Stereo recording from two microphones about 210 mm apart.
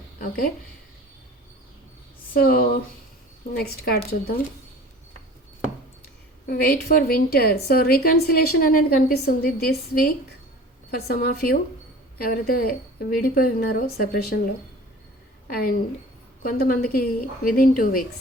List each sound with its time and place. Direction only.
0.2 s a woman's voice: 45° left (ahead or behind)
2.3 s a woman's voice: 45° left (ahead or behind)
6.5 s a woman's voice: 45° left (ahead or behind)
11.1 s a woman's voice: 45° left (ahead or behind)